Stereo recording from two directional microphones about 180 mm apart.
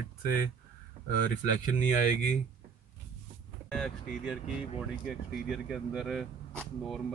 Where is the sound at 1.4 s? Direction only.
45° left (ahead or behind).